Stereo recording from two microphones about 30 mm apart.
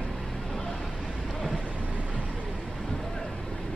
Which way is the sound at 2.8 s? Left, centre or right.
Centre.